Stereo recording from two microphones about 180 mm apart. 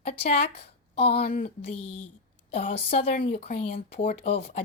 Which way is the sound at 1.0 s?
35° left (ahead or behind).